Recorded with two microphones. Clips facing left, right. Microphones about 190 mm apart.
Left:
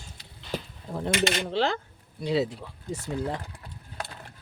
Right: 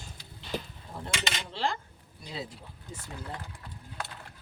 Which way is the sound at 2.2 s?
80° left.